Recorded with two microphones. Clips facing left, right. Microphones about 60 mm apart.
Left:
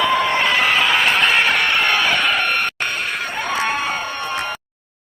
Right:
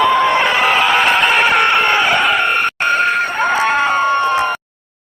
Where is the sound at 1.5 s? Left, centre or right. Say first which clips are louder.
Right 5 dB; right.